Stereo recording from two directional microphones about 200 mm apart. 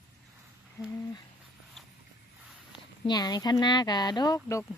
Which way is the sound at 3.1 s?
20° left (ahead or behind).